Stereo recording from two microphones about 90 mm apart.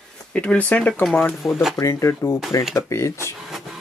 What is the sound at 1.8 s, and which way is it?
Speech, 35° left (ahead or behind).